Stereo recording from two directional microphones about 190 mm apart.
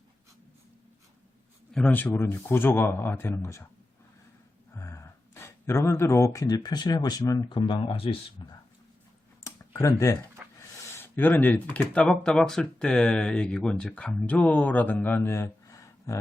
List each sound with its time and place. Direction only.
1.7 s speech: 5° left (ahead or behind)
4.7 s speech: 15° left (ahead or behind)
9.4 s a sound: 15° left (ahead or behind)
10.9 s speech: 10° left (ahead or behind)